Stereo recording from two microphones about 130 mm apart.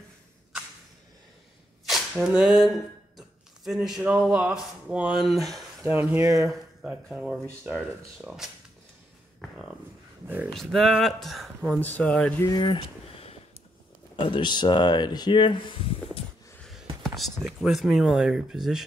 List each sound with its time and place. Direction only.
1.9 s speech: centre (ahead or behind)
5.9 s speech: 15° right (ahead or behind)
6.5 s speech: 5° right (ahead or behind)
9.4 s a sound: centre (ahead or behind)
10.2 s speech: 15° right (ahead or behind)
10.5 s speech: centre (ahead or behind)
11.8 s speech: 10° left (ahead or behind)
12.4 s speech: 35° left (ahead or behind)
14.2 s speech: 35° left (ahead or behind)
17.0 s speech: centre (ahead or behind)